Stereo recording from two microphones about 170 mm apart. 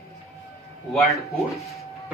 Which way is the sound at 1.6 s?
20° left (ahead or behind).